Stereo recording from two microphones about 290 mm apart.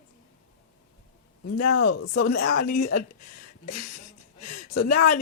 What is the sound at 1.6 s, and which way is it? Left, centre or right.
Speech, left.